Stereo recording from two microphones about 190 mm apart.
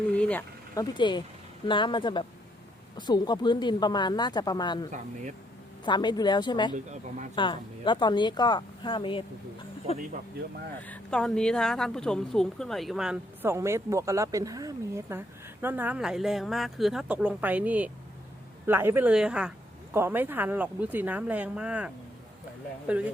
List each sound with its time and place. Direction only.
0.1 s speech: 10° left (ahead or behind)
0.8 s speech: 25° left (ahead or behind)
6.7 s speech: 40° right (ahead or behind)
7.3 s speech: 25° left (ahead or behind)
10.8 s a woman's voice: 10° left (ahead or behind)